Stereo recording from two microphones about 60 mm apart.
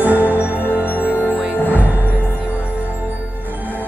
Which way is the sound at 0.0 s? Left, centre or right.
Right.